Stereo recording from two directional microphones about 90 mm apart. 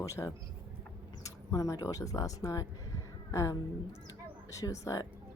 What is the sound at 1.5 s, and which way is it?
A woman's voice, 40° left (ahead or behind).